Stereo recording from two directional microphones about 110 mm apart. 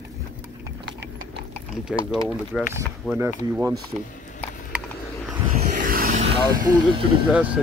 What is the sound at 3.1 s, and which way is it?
Speech, 20° right (ahead or behind).